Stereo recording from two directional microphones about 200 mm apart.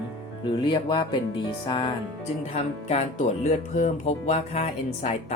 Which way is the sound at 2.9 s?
35° left (ahead or behind).